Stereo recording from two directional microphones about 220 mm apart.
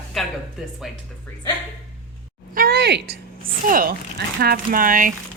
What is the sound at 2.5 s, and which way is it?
Speech, 45° right (ahead or behind).